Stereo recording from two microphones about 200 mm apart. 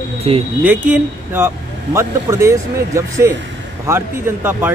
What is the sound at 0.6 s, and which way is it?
Speech, 10° right (ahead or behind).